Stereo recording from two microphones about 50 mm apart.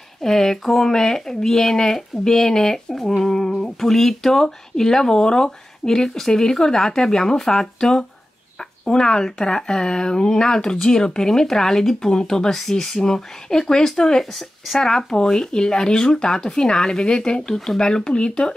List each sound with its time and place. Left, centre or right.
0.2 s speech: centre